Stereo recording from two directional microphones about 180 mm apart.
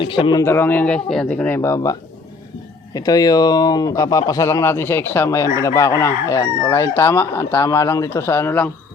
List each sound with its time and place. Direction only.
0.0 s speech: 30° left (ahead or behind)
0.4 s chicken: 10° left (ahead or behind)
2.9 s speech: 20° left (ahead or behind)
5.5 s chicken: 15° left (ahead or behind)